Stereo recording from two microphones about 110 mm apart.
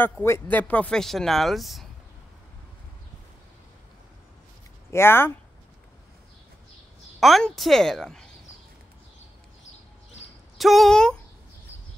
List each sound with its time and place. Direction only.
0.0 s speech: 20° left (ahead or behind); by 1.9 s centre (ahead or behind)
4.9 s speech: 20° left (ahead or behind)
7.2 s speech: centre (ahead or behind)
10.6 s speech: centre (ahead or behind)